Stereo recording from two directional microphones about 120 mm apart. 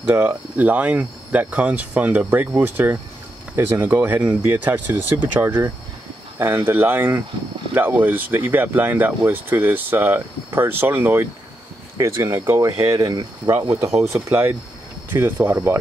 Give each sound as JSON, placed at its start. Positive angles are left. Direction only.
{"t": 0.0, "sound": "speech", "side_deg": -20}
{"t": 14.0, "sound": "speech", "side_deg": -20}